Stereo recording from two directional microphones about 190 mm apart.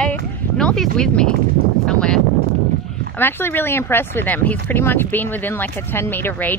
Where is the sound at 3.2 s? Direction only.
10° left (ahead or behind).